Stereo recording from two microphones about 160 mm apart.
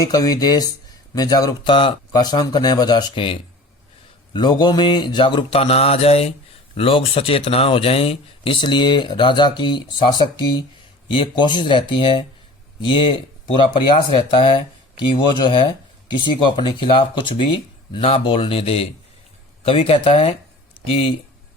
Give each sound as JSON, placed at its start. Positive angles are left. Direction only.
{"t": 0.0, "sound": "speech", "side_deg": 25}